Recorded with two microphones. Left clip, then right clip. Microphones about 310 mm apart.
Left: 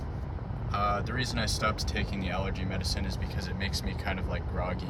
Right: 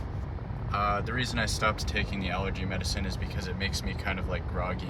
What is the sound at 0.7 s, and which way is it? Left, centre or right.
Speech, centre.